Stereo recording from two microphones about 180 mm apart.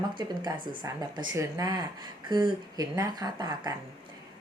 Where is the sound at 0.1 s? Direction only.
25° right (ahead or behind).